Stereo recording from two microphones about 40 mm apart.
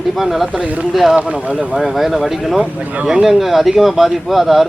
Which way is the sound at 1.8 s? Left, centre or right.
Centre.